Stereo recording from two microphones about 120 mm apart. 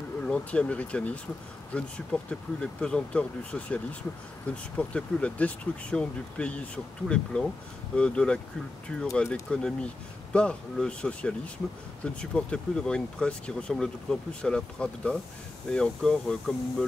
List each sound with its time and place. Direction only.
0.2 s speech: 10° left (ahead or behind)